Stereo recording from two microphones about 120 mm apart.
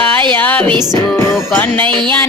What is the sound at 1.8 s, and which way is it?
Music, 40° right (ahead or behind).